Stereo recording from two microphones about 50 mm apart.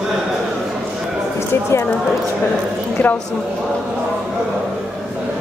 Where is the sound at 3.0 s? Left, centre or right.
Left.